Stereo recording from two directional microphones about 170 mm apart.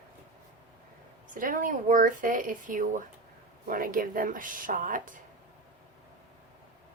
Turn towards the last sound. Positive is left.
turn(degrees=-50)  # may be behind; listen again after turning